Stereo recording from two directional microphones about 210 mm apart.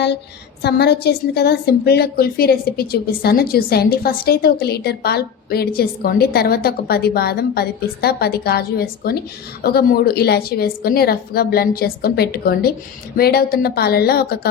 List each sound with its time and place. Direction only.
0.6 s a woman's voice: 50° left (ahead or behind)